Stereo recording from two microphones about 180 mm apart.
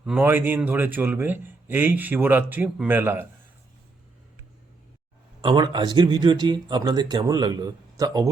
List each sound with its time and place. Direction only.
0.0 s a man's voice: 10° right (ahead or behind)
5.4 s speech: 25° right (ahead or behind)